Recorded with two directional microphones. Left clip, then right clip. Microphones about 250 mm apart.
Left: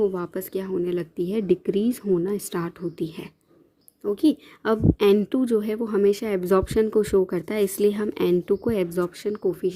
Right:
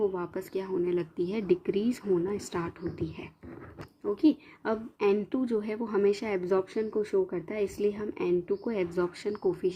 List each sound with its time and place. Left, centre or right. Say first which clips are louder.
0.0 s a woman's voice: left 6 dB; left